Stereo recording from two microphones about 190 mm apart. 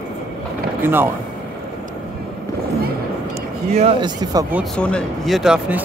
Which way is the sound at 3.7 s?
30° right (ahead or behind).